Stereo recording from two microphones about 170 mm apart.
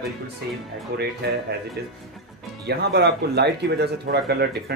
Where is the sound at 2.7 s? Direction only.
75° right (ahead or behind).